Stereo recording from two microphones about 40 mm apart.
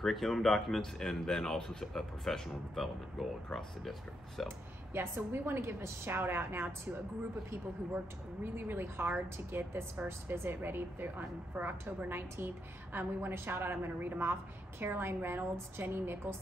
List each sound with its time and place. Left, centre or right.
0.0 s speech: centre
4.4 s speech: centre
4.9 s a woman's voice: right
8.5 s a woman's voice: right
12.1 s a woman's voice: right